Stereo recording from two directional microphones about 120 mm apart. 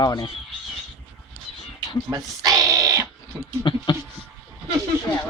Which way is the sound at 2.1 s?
30° right (ahead or behind).